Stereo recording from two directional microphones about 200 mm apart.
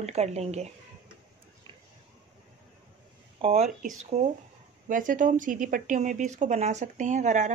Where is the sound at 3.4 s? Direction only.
30° right (ahead or behind).